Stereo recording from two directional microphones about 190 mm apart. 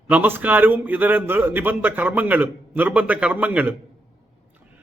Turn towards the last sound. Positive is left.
turn(degrees=-10)  # may be behind; listen again after turning